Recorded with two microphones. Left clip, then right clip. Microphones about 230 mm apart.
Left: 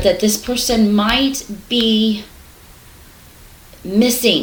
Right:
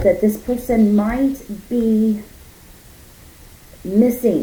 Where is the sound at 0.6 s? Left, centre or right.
Left.